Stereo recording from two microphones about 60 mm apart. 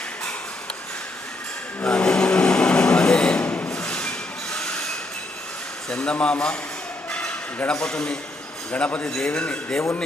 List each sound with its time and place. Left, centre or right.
1.8 s vehicle: centre
3.7 s a sound: centre
4.5 s train: centre
5.9 s a man's voice: centre
7.1 s a sound: centre
7.7 s a man's voice: centre